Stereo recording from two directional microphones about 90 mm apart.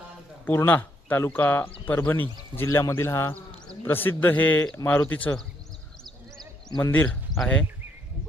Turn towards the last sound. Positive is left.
turn(degrees=0)  # may be behind; listen again after turning